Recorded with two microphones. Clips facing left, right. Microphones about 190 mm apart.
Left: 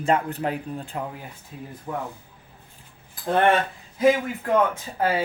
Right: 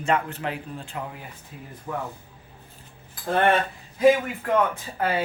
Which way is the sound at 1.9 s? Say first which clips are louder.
Even; 20° left (ahead or behind).